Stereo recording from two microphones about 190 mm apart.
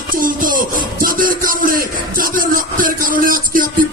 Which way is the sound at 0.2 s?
45° right (ahead or behind).